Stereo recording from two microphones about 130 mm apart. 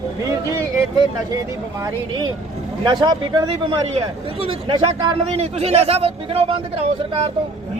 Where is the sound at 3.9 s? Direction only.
45° right (ahead or behind).